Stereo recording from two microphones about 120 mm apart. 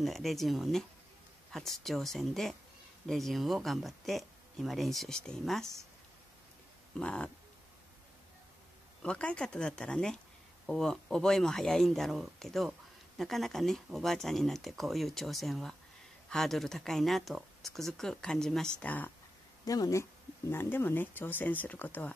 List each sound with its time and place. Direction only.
0.0 s speech: centre (ahead or behind)
7.0 s speech: 10° left (ahead or behind)
9.0 s speech: 10° left (ahead or behind)
19.6 s speech: 30° left (ahead or behind); by 22.1 s 15° left (ahead or behind)